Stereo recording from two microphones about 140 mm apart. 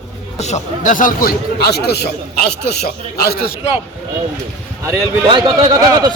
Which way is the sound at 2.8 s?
90° left.